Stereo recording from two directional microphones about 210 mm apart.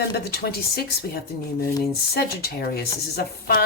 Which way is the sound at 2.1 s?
50° left (ahead or behind).